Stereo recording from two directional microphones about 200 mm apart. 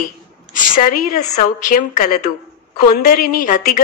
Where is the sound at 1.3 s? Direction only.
40° left (ahead or behind).